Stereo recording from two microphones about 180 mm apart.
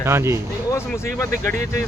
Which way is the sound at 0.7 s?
15° left (ahead or behind).